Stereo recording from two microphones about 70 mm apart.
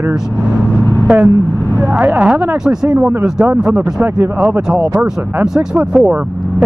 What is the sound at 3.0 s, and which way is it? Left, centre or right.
Speech, centre.